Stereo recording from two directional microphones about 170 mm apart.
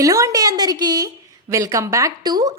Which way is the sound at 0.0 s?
20° right (ahead or behind).